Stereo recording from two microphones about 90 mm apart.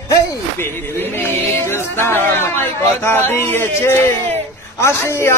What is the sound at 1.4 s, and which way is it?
Speech, 25° left (ahead or behind).